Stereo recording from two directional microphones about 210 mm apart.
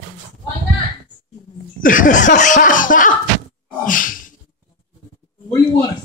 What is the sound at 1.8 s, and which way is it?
Speech, 40° left (ahead or behind).